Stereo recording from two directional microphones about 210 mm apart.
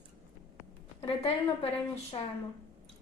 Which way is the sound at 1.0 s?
30° left (ahead or behind).